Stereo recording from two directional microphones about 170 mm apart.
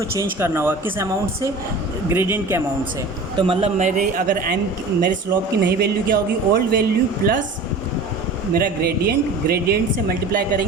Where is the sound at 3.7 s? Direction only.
45° right (ahead or behind).